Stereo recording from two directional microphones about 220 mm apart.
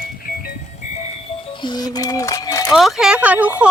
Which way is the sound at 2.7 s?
Centre (ahead or behind).